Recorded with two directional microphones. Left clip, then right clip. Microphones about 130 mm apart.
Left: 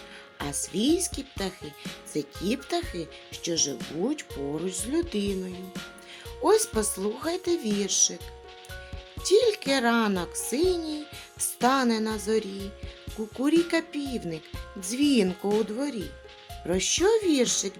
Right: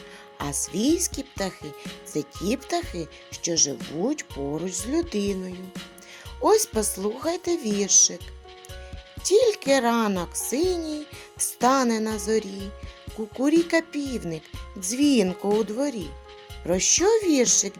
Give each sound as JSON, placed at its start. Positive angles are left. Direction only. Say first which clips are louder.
{"t": 0.3, "sound": "speech", "louder": "right 2 dB", "side_deg": -40}
{"t": 6.4, "sound": "speech", "louder": "right 2 dB", "side_deg": -35}
{"t": 9.2, "sound": "speech", "louder": "right 2 dB", "side_deg": -35}